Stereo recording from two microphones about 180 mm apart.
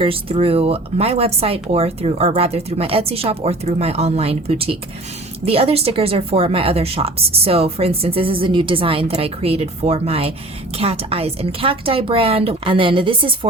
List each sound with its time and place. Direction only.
0.0 s speech: 30° right (ahead or behind)